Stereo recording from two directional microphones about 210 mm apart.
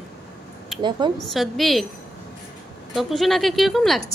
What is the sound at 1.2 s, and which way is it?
Speech, centre (ahead or behind).